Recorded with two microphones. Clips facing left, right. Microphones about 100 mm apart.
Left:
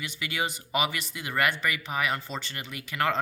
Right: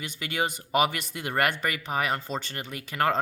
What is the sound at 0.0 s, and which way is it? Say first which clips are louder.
Speech: right 2 dB; 45° right (ahead or behind).